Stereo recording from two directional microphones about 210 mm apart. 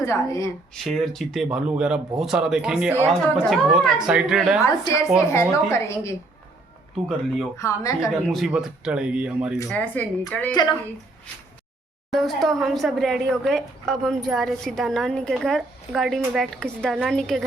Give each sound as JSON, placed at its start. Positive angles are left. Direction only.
{"t": 0.0, "sound": "a woman's voice", "side_deg": 15}
{"t": 0.7, "sound": "a woman's voice", "side_deg": 0}
{"t": 4.6, "sound": "a woman's voice", "side_deg": 15}
{"t": 7.5, "sound": "a woman's voice", "side_deg": 15}
{"t": 8.3, "sound": "a woman's voice", "side_deg": 0}
{"t": 9.6, "sound": "a woman's voice", "side_deg": 5}
{"t": 10.5, "sound": "a woman's voice", "side_deg": 20}
{"t": 12.1, "sound": "a woman's voice", "side_deg": 0}